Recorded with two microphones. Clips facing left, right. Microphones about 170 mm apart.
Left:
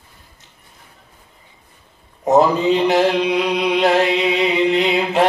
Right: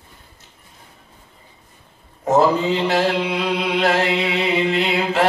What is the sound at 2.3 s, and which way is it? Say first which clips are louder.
Mantra: left 2 dB; 20° left (ahead or behind).